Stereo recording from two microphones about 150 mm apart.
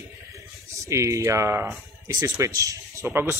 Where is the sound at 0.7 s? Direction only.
20° right (ahead or behind).